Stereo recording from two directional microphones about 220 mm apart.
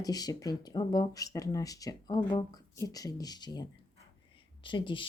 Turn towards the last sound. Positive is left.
turn(degrees=20)  # may be behind; listen again after turning